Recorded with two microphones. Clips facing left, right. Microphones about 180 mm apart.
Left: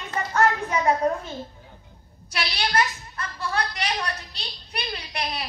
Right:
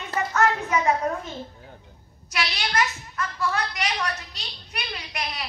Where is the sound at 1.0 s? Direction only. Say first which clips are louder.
Left 3 dB; 35° left (ahead or behind).